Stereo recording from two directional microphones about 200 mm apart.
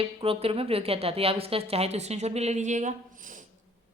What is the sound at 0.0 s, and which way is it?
A woman's voice, 30° right (ahead or behind).